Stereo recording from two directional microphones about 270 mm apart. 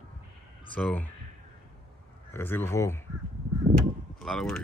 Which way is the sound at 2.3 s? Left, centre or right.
Centre.